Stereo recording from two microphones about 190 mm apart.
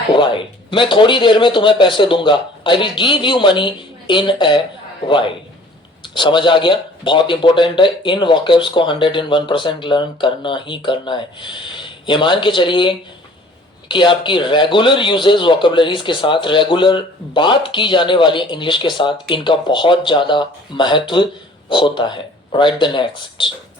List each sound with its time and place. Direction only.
0.1 s speech: 25° left (ahead or behind)